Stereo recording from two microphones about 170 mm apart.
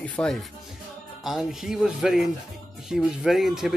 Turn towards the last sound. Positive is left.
turn(degrees=0)  # may be behind; listen again after turning